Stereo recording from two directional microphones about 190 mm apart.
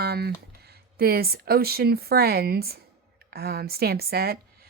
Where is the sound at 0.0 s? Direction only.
55° right (ahead or behind).